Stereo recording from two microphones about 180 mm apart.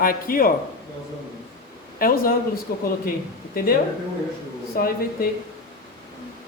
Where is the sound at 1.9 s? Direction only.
55° left (ahead or behind).